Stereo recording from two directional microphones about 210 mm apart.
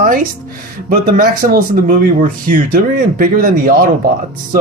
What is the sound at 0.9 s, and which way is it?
Speech, 40° right (ahead or behind).